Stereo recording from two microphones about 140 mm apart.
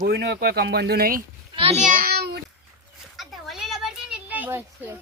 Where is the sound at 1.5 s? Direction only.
40° right (ahead or behind).